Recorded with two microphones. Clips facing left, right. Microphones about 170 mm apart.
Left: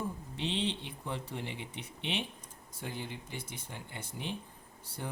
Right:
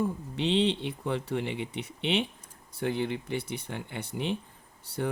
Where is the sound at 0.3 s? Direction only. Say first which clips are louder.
Right 9 dB; 70° right (ahead or behind).